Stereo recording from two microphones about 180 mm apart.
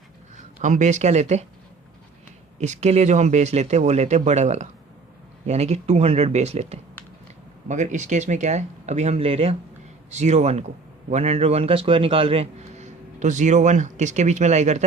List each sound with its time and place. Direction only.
0.6 s a man's voice: 40° right (ahead or behind)
2.6 s a man's voice: 40° right (ahead or behind)